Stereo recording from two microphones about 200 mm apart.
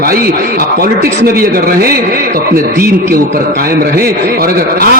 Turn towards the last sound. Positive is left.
turn(degrees=-50)  # may be behind; listen again after turning